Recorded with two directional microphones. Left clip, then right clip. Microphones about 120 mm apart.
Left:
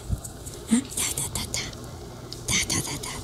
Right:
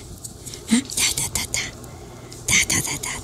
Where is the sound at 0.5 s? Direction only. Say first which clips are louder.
Right 4 dB; 5° left (ahead or behind).